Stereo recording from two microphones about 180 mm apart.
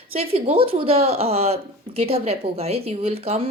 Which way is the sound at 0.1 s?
30° right (ahead or behind).